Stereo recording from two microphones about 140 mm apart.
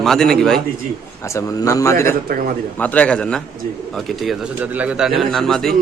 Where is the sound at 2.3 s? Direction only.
90° right.